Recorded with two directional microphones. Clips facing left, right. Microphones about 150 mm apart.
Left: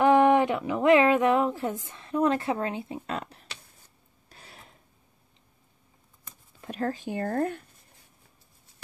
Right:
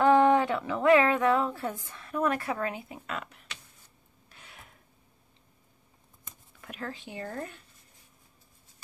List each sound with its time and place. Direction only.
0.0 s a sound: 15° left (ahead or behind); by 3.5 s 35° left (ahead or behind)
4.3 s filing: 35° left (ahead or behind)
6.6 s speech: 40° left (ahead or behind)